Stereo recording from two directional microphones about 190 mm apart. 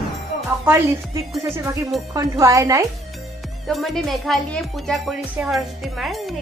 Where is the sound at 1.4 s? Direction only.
15° right (ahead or behind).